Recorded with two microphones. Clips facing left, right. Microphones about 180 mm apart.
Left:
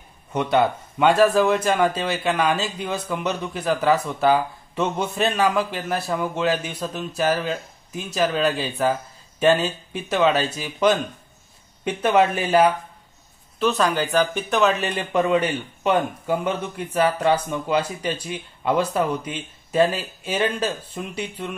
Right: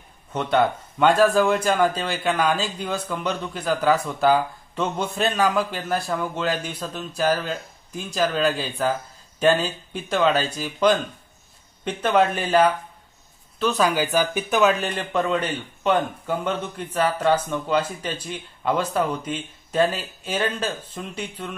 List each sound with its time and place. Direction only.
0.3 s speech: 10° left (ahead or behind)